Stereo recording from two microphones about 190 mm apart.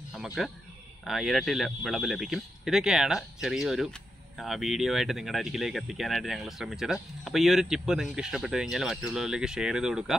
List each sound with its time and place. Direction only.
0.1 s speech: 5° right (ahead or behind)